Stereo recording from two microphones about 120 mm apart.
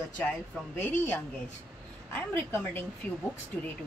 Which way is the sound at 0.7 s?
15° left (ahead or behind).